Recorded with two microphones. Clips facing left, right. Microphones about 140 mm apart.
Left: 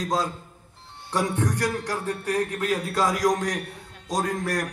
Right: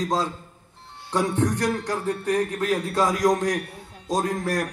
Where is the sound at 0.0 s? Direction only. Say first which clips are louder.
Right 1 dB; 30° right (ahead or behind).